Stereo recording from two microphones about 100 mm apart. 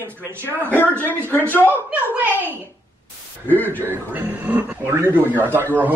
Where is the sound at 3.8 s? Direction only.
15° right (ahead or behind).